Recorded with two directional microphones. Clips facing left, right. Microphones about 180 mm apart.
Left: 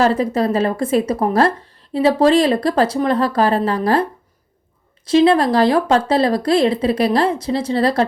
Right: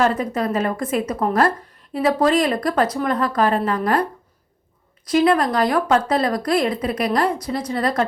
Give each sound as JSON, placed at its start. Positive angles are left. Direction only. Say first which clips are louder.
{"t": 0.0, "sound": "speech", "louder": "left 4 dB", "side_deg": 30}
{"t": 5.0, "sound": "speech", "louder": "left 4 dB", "side_deg": 30}